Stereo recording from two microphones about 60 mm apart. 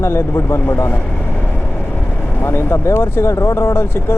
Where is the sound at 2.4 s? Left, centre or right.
Left.